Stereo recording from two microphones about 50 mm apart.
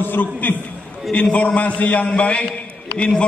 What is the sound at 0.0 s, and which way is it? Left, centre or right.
A man's voice, left.